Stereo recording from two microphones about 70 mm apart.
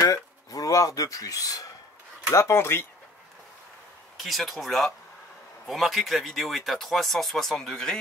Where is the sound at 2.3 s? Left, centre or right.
Left.